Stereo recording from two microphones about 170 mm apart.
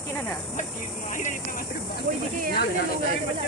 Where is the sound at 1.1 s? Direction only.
50° left (ahead or behind).